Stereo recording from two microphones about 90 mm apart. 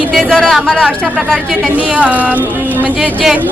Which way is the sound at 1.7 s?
15° right (ahead or behind).